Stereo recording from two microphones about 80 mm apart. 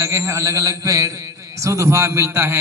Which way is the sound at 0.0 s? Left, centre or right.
Right.